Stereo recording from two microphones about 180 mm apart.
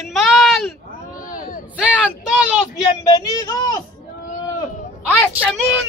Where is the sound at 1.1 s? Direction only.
50° left (ahead or behind).